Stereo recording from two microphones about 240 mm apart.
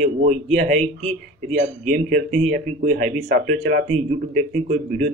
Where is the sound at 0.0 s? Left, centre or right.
Right.